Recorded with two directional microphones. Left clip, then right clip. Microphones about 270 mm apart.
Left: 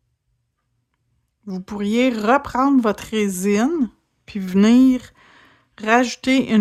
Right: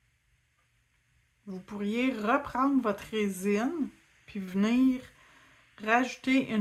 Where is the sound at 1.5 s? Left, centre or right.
Left.